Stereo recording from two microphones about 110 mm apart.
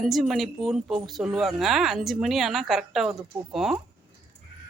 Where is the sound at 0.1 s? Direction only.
Centre (ahead or behind).